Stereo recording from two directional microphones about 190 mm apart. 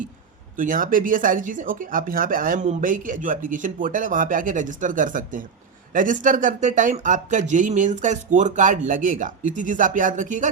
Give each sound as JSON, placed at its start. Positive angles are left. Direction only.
{"t": 0.5, "sound": "speech", "side_deg": -45}